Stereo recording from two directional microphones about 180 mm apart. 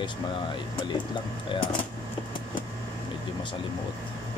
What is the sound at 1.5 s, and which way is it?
Speech, 25° left (ahead or behind).